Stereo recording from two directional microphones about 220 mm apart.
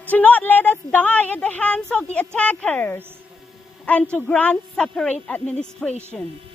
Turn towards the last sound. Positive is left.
turn(degrees=0)  # may be behind; listen again after turning